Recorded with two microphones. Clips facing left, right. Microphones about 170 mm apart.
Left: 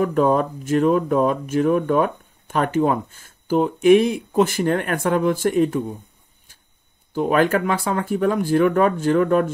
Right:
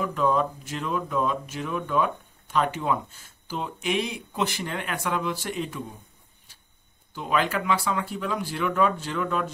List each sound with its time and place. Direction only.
0.0 s speech: 50° left (ahead or behind)
7.2 s speech: 50° left (ahead or behind)